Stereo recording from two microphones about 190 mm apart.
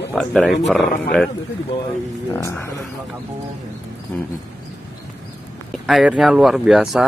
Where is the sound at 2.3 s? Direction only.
15° left (ahead or behind).